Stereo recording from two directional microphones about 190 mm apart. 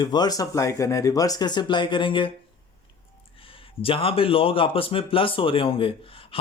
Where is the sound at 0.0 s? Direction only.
20° left (ahead or behind).